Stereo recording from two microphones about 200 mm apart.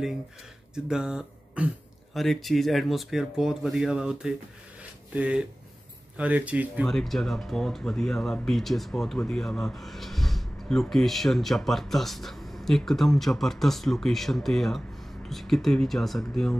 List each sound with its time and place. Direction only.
0.7 s speech: 5° right (ahead or behind)